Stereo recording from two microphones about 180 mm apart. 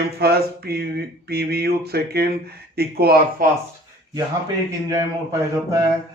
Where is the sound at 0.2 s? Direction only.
60° right (ahead or behind).